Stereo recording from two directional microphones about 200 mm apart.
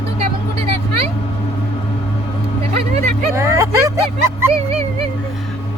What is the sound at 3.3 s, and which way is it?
Speech, 15° right (ahead or behind).